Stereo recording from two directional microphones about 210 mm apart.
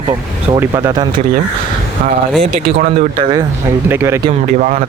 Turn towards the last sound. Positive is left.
turn(degrees=-10)  # may be behind; listen again after turning